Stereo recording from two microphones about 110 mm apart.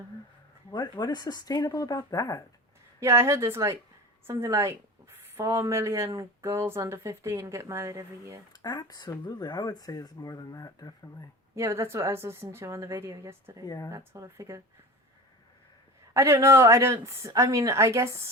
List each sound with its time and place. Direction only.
0.7 s speech: 40° left (ahead or behind)
3.0 s a woman's voice: 25° right (ahead or behind)
8.5 s speech: 35° left (ahead or behind)
11.5 s speech: 25° right (ahead or behind)
13.7 s speech: 35° left (ahead or behind)
13.9 s speech: 25° right (ahead or behind)
16.1 s speech: 25° right (ahead or behind)